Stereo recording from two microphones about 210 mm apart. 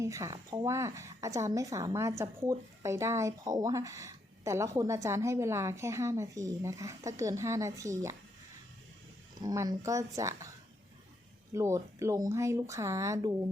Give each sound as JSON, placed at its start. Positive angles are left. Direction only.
{"t": 0.0, "sound": "speech", "side_deg": -15}
{"t": 9.4, "sound": "speech", "side_deg": -20}
{"t": 11.5, "sound": "speech", "side_deg": -15}